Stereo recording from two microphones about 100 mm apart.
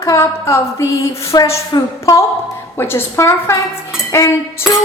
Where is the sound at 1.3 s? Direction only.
45° left (ahead or behind).